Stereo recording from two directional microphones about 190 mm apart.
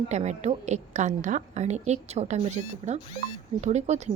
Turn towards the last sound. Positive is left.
turn(degrees=-35)  # may be behind; listen again after turning